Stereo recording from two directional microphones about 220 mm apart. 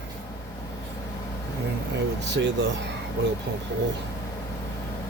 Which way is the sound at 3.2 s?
50° right (ahead or behind).